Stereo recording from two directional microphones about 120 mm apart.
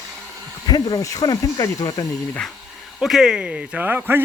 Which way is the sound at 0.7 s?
35° left (ahead or behind).